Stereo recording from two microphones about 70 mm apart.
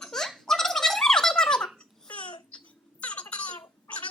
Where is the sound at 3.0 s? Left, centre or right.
Centre.